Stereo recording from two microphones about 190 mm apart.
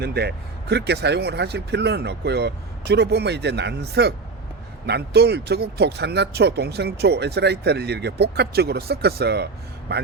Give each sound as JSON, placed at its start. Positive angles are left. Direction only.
{"t": 0.0, "sound": "speech", "side_deg": -55}